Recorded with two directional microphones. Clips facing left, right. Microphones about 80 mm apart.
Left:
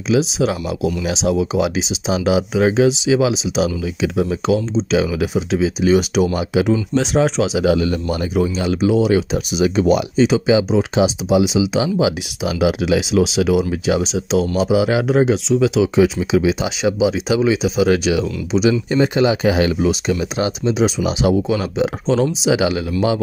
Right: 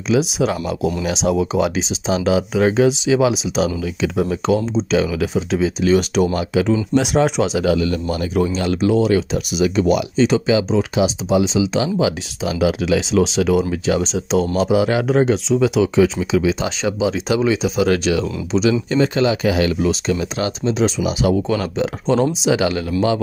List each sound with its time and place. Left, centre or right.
0.1 s speech: centre
6.3 s speech: centre
7.0 s speech: centre
7.5 s speech: left
8.5 s speech: centre
10.1 s speech: centre
10.4 s speech: centre
13.2 s speech: centre
16.0 s speech: centre
18.7 s speech: left
21.5 s speech: centre
22.6 s speech: centre